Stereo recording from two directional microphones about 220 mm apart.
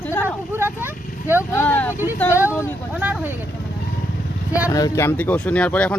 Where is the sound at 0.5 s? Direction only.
10° right (ahead or behind).